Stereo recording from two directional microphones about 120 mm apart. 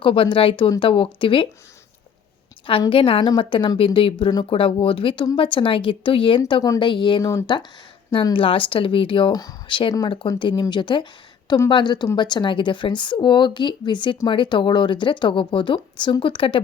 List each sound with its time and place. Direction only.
0.0 s a woman's voice: 45° left (ahead or behind)
2.9 s a woman's voice: 50° left (ahead or behind)
7.2 s speech: 25° left (ahead or behind)
8.1 s a woman's voice: 45° left (ahead or behind)
9.3 s speech: 30° left (ahead or behind)
9.6 s a woman's voice: 45° left (ahead or behind)